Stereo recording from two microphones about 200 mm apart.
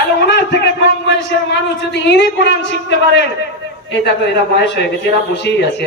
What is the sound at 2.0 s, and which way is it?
Speech, 60° left (ahead or behind).